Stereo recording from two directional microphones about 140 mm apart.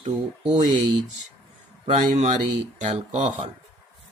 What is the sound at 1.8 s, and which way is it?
Speech, 50° right (ahead or behind).